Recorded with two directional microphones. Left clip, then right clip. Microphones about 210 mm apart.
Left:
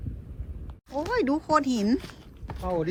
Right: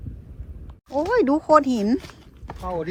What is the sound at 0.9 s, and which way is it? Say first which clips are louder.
Speech: right 7 dB; centre (ahead or behind).